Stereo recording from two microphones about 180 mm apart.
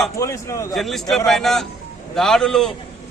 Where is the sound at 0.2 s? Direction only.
15° left (ahead or behind).